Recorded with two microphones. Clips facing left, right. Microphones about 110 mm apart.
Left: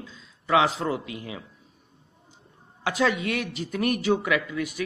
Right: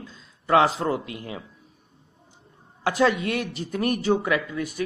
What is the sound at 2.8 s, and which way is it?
Speech, 40° right (ahead or behind).